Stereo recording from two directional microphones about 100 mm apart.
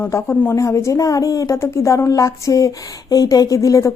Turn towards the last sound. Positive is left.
turn(degrees=35)  # may be behind; listen again after turning